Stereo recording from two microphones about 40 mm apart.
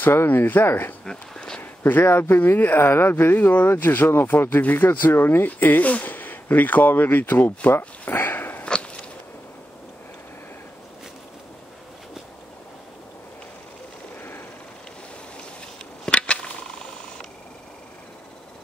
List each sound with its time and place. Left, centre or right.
0.0 s speech: left
1.0 s a sound: centre
1.6 s speech: left
2.9 s speech: left
3.3 s speech: left
5.5 s speech: left
8.1 s dog: left
16.1 s a sound: left